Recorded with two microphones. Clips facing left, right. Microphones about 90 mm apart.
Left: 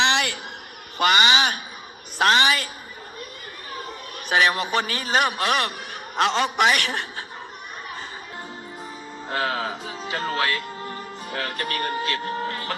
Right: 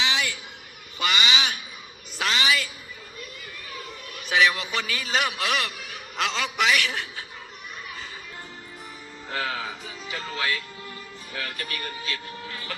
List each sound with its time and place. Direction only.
0.0 s a sound: 65° left (ahead or behind)
0.9 s a woman's voice: 50° left (ahead or behind)
3.7 s speech: 45° left (ahead or behind)
9.3 s speech: 40° left (ahead or behind)